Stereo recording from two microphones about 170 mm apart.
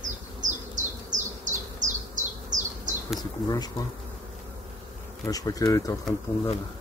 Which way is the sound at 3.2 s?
25° left (ahead or behind).